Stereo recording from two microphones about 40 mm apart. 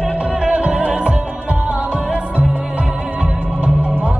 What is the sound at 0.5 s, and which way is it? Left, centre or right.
Music, right.